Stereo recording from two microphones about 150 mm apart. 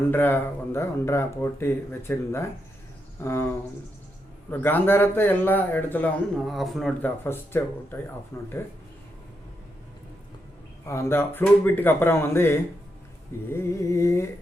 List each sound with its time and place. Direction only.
0.1 s speech: 15° left (ahead or behind)
4.5 s speech: 15° left (ahead or behind)
7.0 s speech: 15° left (ahead or behind)
10.8 s speech: 20° left (ahead or behind)
13.5 s a sound: 20° left (ahead or behind)